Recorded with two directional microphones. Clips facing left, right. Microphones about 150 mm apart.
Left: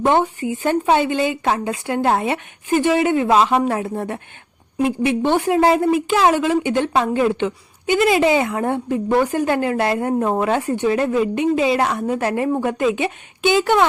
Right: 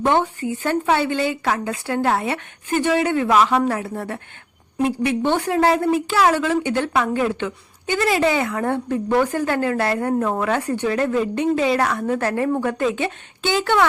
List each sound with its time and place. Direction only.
0.0 s a woman's voice: 15° left (ahead or behind)